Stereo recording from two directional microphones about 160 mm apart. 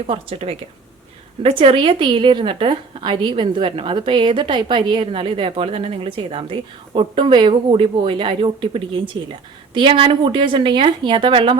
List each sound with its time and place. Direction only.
0.1 s a woman's voice: 35° right (ahead or behind)